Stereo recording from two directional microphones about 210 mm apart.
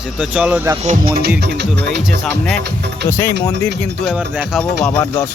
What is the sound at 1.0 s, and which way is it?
Speech, 45° right (ahead or behind).